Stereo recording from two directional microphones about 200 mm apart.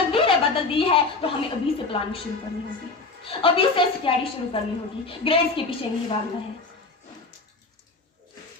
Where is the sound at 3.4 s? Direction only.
25° left (ahead or behind).